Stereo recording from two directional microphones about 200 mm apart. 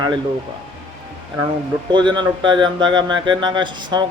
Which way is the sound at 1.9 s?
20° right (ahead or behind).